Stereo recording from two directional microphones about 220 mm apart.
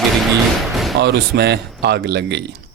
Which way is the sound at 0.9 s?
50° right (ahead or behind).